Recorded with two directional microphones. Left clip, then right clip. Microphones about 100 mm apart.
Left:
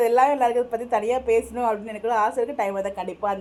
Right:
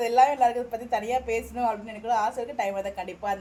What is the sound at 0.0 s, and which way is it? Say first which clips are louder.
A woman's voice: left 2 dB; 55° left (ahead or behind).